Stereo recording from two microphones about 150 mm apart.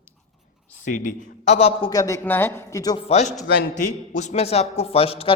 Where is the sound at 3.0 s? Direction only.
50° left (ahead or behind).